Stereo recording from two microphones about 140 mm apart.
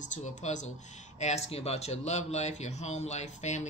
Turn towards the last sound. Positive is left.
turn(degrees=55)  # may be behind; listen again after turning